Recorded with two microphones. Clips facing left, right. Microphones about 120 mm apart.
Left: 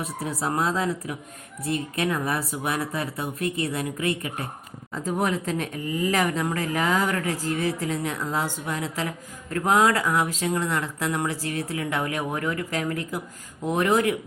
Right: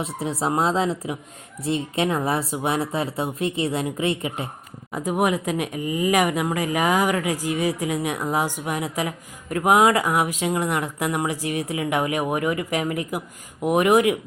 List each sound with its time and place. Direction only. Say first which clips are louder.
0.0 s speech: right 3 dB; 25° right (ahead or behind)
5.0 s speech: right 3 dB; 10° right (ahead or behind)